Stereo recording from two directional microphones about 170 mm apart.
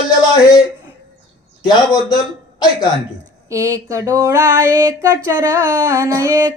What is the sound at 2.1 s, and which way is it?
Speech, 25° left (ahead or behind).